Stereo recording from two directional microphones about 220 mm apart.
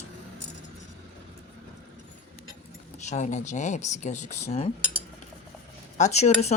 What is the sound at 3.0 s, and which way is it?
Speech, 30° left (ahead or behind).